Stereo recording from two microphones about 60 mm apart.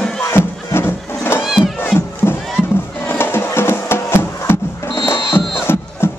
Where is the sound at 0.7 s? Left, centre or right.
Left.